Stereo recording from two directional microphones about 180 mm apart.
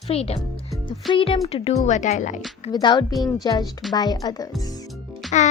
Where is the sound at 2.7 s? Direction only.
25° left (ahead or behind).